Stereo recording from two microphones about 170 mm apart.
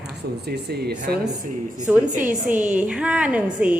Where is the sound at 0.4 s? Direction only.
70° right (ahead or behind).